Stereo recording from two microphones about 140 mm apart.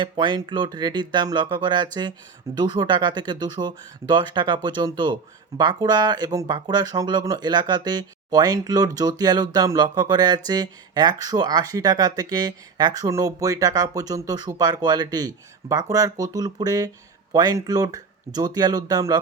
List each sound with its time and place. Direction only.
0.0 s speech: 35° right (ahead or behind)